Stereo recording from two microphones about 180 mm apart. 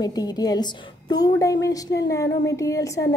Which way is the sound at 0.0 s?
20° left (ahead or behind).